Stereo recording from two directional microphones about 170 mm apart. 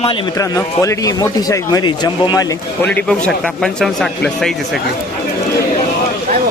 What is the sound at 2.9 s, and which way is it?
A man's voice, 5° left (ahead or behind).